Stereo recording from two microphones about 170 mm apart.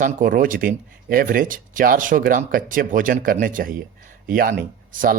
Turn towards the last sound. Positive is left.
turn(degrees=-55)  # may be behind; listen again after turning